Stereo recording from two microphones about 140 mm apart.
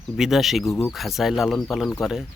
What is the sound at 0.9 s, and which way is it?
Speech, centre (ahead or behind).